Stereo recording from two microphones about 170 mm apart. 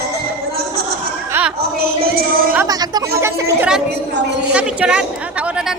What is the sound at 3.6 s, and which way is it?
Speech, 5° right (ahead or behind).